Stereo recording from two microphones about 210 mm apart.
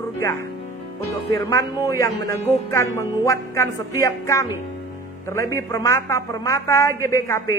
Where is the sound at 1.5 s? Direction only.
15° left (ahead or behind).